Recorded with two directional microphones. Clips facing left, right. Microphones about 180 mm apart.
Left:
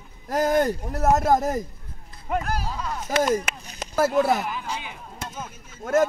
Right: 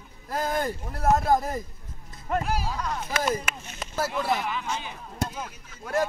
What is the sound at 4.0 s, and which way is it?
Speech, 45° left (ahead or behind).